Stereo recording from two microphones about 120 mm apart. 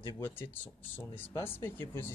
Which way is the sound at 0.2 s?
15° left (ahead or behind).